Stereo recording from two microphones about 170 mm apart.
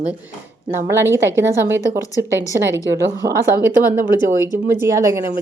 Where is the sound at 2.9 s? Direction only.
20° right (ahead or behind).